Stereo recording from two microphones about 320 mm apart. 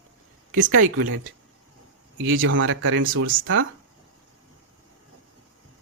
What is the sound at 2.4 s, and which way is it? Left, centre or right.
Speech, right.